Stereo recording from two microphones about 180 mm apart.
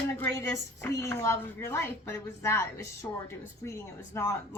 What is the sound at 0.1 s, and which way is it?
A woman's voice, 15° left (ahead or behind).